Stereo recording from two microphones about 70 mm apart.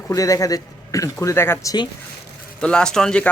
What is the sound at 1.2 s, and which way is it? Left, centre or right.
Speech, left.